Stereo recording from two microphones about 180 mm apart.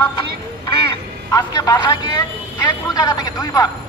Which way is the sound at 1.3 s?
20° left (ahead or behind).